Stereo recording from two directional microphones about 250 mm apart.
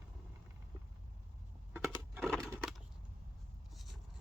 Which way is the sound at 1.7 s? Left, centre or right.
Centre.